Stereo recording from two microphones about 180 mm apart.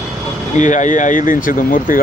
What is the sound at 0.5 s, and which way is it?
Speech, 45° left (ahead or behind).